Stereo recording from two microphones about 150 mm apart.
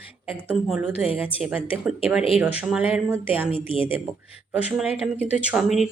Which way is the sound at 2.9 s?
10° right (ahead or behind).